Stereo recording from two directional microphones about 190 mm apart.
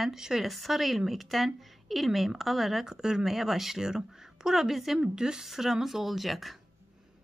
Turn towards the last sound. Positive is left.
turn(degrees=0)  # may be behind; listen again after turning